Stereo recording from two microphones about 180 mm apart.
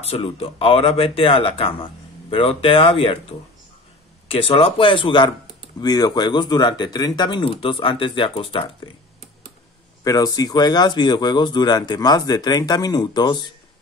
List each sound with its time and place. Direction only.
0.0 s speech: 35° left (ahead or behind)
10.0 s speech: 20° left (ahead or behind)